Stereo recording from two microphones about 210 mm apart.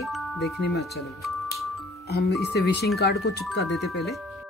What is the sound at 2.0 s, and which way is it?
Speech, 50° left (ahead or behind).